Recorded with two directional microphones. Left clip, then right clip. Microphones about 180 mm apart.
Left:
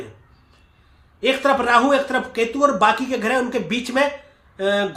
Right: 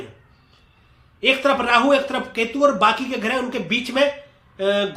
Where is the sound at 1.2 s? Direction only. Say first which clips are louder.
Even; 15° left (ahead or behind).